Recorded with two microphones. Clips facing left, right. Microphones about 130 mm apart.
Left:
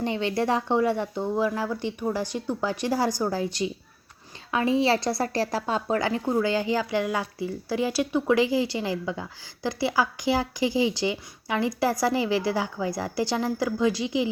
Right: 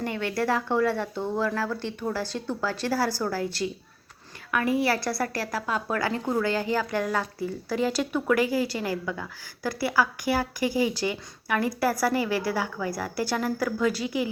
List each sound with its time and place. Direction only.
0.0 s a woman's voice: 20° left (ahead or behind)